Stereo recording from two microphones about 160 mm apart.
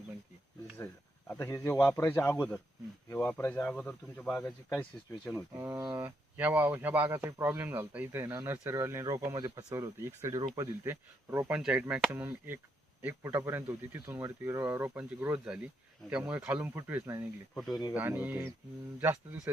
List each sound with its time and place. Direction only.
1.3 s speech: 15° left (ahead or behind)
5.5 s speech: 15° right (ahead or behind)
6.0 s speech: 10° right (ahead or behind)
17.5 s speech: centre (ahead or behind)
17.9 s speech: 10° right (ahead or behind)